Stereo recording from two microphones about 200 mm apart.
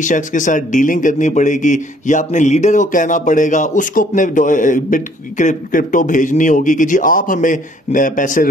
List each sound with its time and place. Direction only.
0.0 s speech: 40° left (ahead or behind)